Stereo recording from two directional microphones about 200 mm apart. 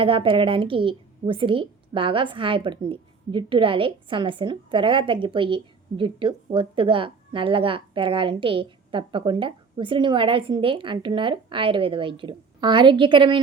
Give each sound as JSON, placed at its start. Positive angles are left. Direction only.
{"t": 0.0, "sound": "a woman's voice", "side_deg": -25}